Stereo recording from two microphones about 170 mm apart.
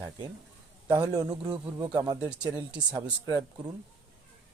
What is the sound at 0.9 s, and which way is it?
A man's voice, 20° right (ahead or behind).